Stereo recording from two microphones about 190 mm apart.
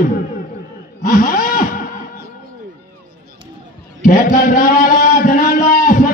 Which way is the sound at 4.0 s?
45° left (ahead or behind).